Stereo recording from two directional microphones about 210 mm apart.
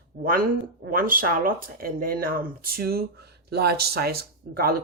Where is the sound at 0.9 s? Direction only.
40° right (ahead or behind).